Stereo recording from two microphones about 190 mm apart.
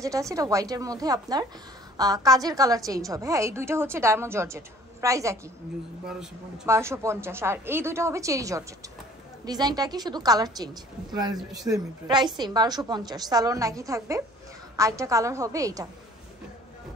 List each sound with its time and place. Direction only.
0.0 s a woman's voice: 15° right (ahead or behind)
6.6 s a woman's voice: 15° right (ahead or behind)